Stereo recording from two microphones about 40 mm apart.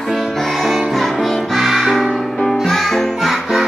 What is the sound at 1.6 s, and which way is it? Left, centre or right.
Music, centre.